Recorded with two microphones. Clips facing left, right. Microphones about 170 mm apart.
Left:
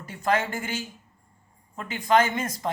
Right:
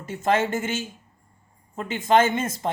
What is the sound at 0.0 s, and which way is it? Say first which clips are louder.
Speech: right 3 dB; 25° right (ahead or behind).